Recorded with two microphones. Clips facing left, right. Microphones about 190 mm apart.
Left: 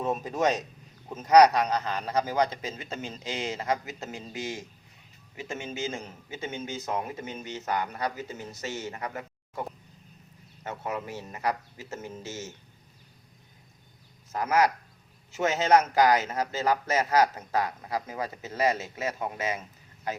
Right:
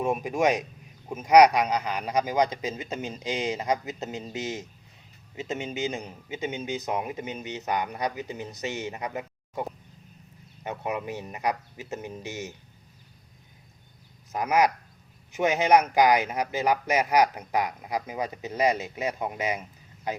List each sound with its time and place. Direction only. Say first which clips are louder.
0.0 s a man's voice: right 2 dB; 10° right (ahead or behind)
14.3 s a man's voice: right 1 dB; 15° right (ahead or behind)